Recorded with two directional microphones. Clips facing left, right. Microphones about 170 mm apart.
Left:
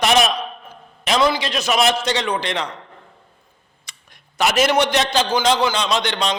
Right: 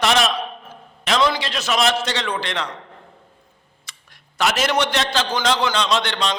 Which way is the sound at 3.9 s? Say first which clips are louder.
Right 1 dB; 15° left (ahead or behind).